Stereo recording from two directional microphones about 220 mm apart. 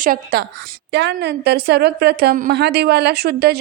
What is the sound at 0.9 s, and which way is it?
A woman's voice, 50° right (ahead or behind).